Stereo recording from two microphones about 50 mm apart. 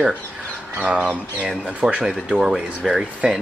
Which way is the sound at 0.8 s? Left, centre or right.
Right.